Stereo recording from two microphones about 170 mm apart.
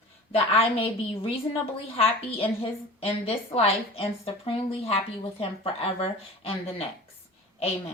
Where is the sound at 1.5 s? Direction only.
35° left (ahead or behind).